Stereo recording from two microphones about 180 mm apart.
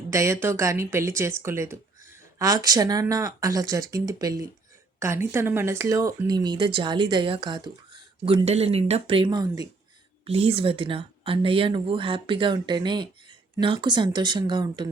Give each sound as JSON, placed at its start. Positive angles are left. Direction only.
{"t": 0.1, "sound": "speech", "side_deg": -15}
{"t": 10.2, "sound": "speech", "side_deg": -35}